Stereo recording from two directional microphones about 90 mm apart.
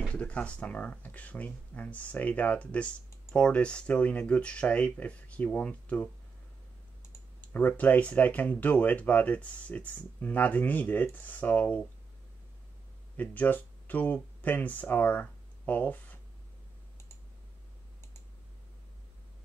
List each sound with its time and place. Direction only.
0.1 s speech: 15° left (ahead or behind)
7.4 s speech: 20° left (ahead or behind)
13.1 s speech: 20° left (ahead or behind)